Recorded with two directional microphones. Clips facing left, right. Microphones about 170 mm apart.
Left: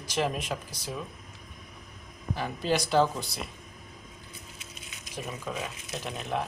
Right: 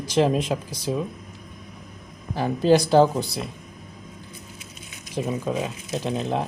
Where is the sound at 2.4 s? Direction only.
35° right (ahead or behind).